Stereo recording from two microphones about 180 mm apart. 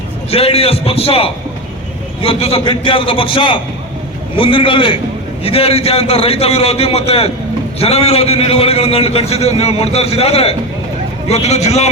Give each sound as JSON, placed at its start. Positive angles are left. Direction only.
{"t": 0.3, "sound": "a man's voice", "side_deg": 35}